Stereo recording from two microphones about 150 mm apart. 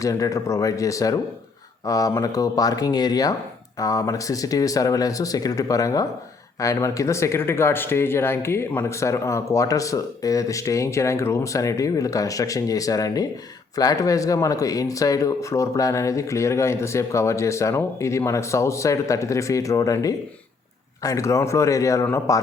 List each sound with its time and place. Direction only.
0.0 s speech: 20° left (ahead or behind)